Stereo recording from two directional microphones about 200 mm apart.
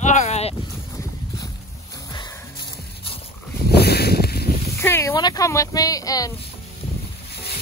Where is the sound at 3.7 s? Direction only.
50° left (ahead or behind).